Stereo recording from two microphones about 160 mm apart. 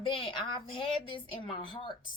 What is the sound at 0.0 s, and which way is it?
A woman's voice, 35° left (ahead or behind).